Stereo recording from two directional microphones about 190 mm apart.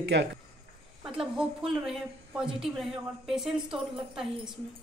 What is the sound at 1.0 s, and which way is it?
A woman's voice, centre (ahead or behind).